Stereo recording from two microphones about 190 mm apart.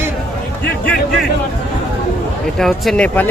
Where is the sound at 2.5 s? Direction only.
Centre (ahead or behind).